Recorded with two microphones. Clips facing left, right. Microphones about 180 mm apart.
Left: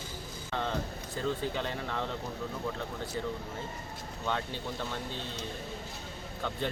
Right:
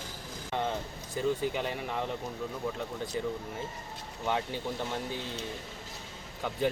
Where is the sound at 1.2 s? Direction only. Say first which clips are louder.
Right 3 dB; 10° right (ahead or behind).